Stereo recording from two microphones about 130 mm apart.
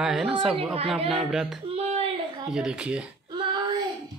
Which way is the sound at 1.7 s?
50° right (ahead or behind).